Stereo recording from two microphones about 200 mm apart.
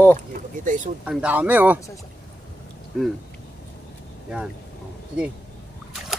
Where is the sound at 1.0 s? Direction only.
5° right (ahead or behind).